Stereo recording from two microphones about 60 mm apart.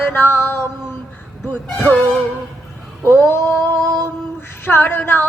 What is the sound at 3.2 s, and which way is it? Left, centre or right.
Speech, left.